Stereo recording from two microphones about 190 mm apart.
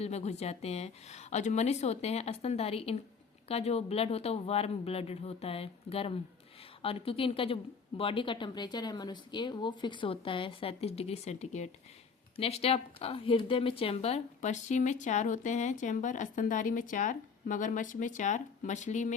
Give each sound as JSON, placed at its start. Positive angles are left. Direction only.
{"t": 0.0, "sound": "a woman's voice", "side_deg": 35}